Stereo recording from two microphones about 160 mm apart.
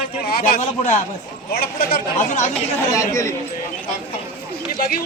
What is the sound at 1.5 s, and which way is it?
Speech, 70° left (ahead or behind).